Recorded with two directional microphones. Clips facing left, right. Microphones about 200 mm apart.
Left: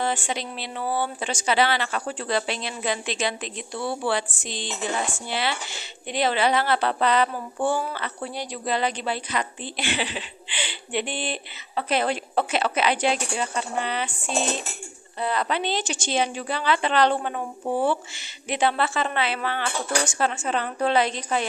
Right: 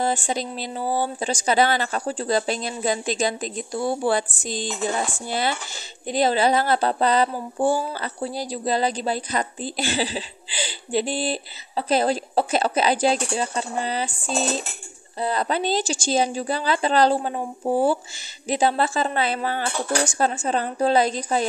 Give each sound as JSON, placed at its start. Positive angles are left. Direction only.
{"t": 0.0, "sound": "a woman's voice", "side_deg": -40}
{"t": 17.4, "sound": "speech", "side_deg": -15}
{"t": 18.5, "sound": "a woman's voice", "side_deg": -40}